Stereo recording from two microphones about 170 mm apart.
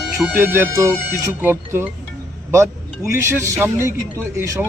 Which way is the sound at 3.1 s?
15° right (ahead or behind).